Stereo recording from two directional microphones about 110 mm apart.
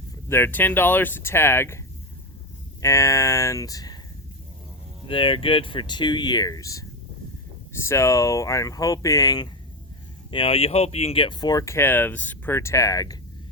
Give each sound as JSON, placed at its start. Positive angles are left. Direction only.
{"t": 0.3, "sound": "speech", "side_deg": 20}
{"t": 2.8, "sound": "speech", "side_deg": 25}
{"t": 5.0, "sound": "speech", "side_deg": 55}
{"t": 10.3, "sound": "speech", "side_deg": 60}
{"t": 11.6, "sound": "speech", "side_deg": 25}